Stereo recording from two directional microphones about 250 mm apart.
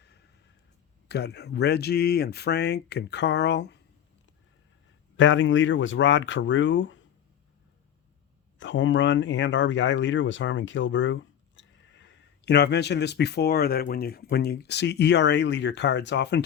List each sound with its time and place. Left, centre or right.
1.0 s speech: left
5.1 s speech: left
8.5 s speech: left